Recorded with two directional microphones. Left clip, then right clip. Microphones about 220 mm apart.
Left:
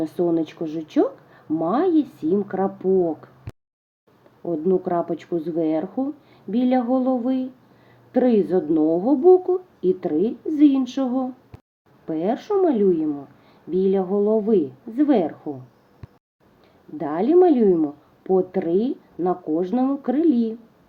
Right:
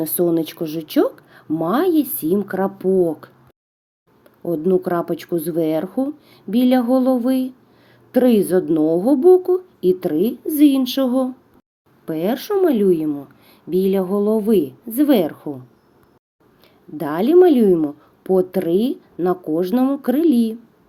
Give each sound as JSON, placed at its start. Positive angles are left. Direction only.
{"t": 0.0, "sound": "a woman's voice", "side_deg": -40}
{"t": 4.4, "sound": "a woman's voice", "side_deg": -40}
{"t": 17.0, "sound": "a woman's voice", "side_deg": -40}